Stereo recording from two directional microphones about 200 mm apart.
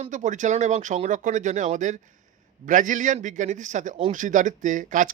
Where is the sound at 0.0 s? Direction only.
40° right (ahead or behind).